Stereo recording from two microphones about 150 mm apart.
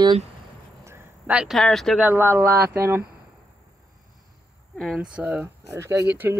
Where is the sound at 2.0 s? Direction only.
15° right (ahead or behind).